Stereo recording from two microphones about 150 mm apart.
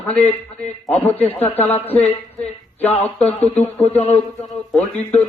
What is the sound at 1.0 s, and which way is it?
Speech, 10° left (ahead or behind).